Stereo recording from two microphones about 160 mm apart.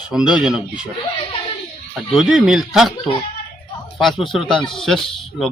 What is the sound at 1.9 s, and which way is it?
Speech, centre (ahead or behind).